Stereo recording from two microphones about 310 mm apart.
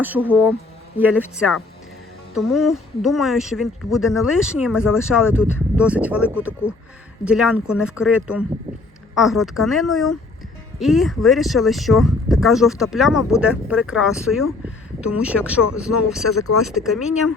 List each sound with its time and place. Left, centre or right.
0.0 s speech: centre
16.4 s speech: left
16.6 s speech: centre